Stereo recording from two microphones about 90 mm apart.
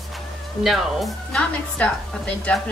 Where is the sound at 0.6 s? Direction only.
Centre (ahead or behind).